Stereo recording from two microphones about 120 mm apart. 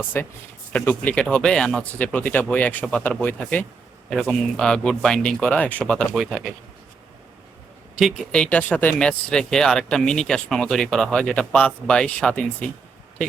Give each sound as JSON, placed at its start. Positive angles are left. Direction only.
{"t": 0.1, "sound": "speech", "side_deg": 15}
{"t": 7.9, "sound": "speech", "side_deg": 0}